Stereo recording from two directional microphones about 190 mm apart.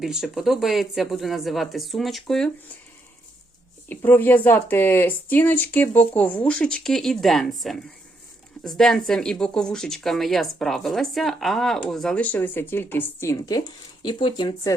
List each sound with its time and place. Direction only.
0.0 s speech: centre (ahead or behind)
3.8 s speech: 10° left (ahead or behind)